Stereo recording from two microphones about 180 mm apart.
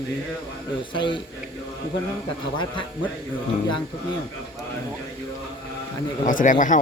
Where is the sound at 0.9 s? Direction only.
25° left (ahead or behind).